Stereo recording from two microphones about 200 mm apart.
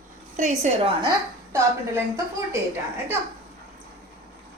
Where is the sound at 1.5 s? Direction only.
15° right (ahead or behind).